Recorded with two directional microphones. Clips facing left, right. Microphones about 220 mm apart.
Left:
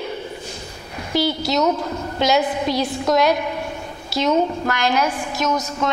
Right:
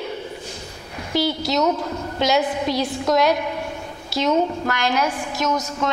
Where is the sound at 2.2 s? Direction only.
10° left (ahead or behind).